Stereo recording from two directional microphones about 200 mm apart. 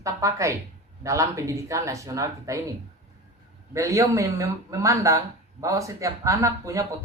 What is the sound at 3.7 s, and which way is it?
Speech, 15° right (ahead or behind).